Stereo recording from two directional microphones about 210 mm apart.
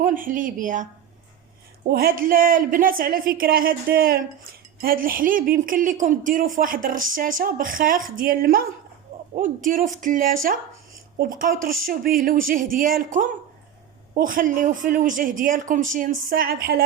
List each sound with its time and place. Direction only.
0.0 s a man's voice: 40° right (ahead or behind)
1.9 s a man's voice: 45° right (ahead or behind)